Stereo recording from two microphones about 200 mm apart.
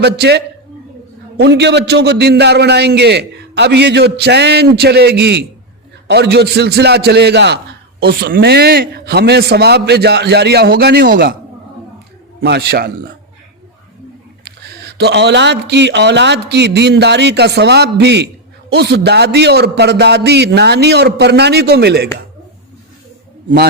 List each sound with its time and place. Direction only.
0.0 s a man's voice: 55° right (ahead or behind)
12.4 s a man's voice: 55° right (ahead or behind)
14.4 s a man's voice: 55° right (ahead or behind)